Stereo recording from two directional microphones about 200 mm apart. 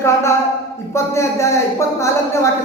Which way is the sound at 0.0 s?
15° left (ahead or behind).